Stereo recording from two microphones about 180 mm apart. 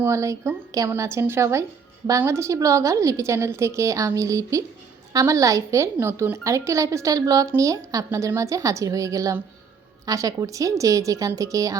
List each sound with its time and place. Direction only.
0.0 s a woman's voice: 15° right (ahead or behind)